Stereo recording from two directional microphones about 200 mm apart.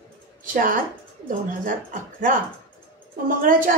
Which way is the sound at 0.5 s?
45° right (ahead or behind).